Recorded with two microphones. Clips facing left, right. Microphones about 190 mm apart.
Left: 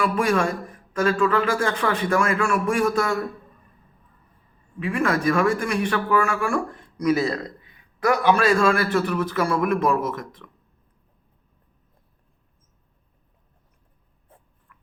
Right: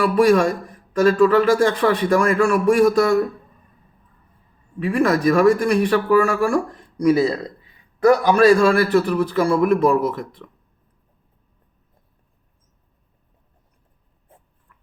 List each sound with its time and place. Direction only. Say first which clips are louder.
0.0 s speech: right 6 dB; 35° right (ahead or behind)
4.8 s speech: right 5 dB; 35° right (ahead or behind)